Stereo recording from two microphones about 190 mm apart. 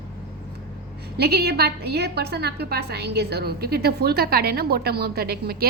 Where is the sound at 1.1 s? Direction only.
55° right (ahead or behind).